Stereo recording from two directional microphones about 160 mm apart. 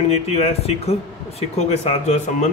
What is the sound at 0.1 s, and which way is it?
A man's voice, 40° left (ahead or behind).